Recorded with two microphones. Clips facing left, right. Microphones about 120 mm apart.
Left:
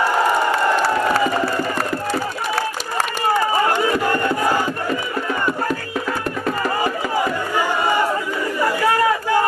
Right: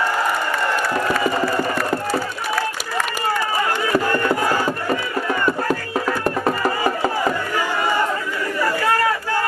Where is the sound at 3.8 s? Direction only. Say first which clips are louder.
Left 1 dB; 20° left (ahead or behind).